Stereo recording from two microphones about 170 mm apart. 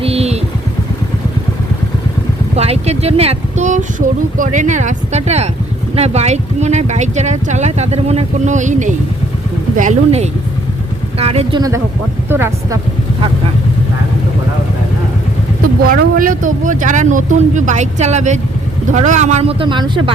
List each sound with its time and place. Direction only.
0.0 s vehicle: 35° right (ahead or behind)
2.6 s speech: 40° right (ahead or behind)
12.3 s speech: 15° right (ahead or behind)
15.8 s speech: 55° right (ahead or behind); by 20.0 s 25° right (ahead or behind)